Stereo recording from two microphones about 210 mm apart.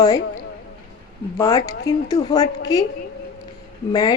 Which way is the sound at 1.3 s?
15° left (ahead or behind).